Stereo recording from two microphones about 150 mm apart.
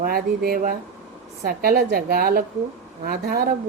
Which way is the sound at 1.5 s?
90° right.